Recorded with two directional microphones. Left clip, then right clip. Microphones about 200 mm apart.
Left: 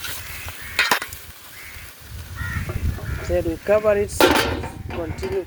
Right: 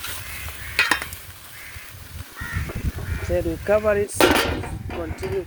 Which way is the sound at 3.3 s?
Centre (ahead or behind).